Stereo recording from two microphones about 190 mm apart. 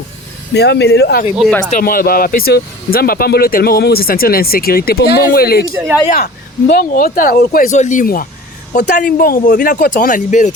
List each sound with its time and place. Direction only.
0.5 s speech: 60° left (ahead or behind)
1.4 s speech: 5° left (ahead or behind)
1.7 s speech: 50° left (ahead or behind)